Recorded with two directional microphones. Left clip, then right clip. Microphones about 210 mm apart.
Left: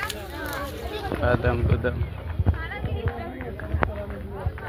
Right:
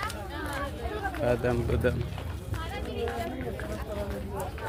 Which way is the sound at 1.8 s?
25° right (ahead or behind).